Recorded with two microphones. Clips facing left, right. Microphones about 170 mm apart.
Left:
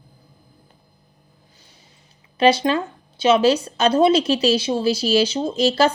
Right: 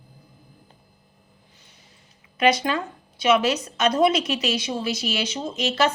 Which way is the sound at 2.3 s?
30° left (ahead or behind).